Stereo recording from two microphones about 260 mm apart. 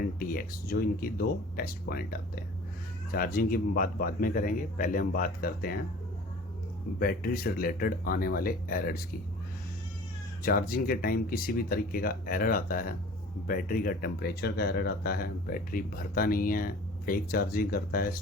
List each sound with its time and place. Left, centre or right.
0.0 s speech: left
7.0 s speech: left
10.4 s speech: left